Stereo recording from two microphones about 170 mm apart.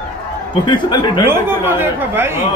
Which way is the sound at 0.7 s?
25° left (ahead or behind).